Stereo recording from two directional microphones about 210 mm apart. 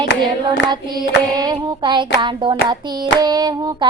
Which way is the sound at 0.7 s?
20° right (ahead or behind).